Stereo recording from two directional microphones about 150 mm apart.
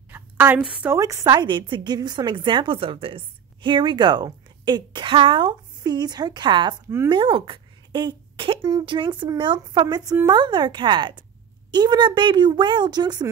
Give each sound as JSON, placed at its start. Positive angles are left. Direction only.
{"t": 0.1, "sound": "a woman's voice", "side_deg": -15}
{"t": 0.9, "sound": "a woman's voice", "side_deg": -20}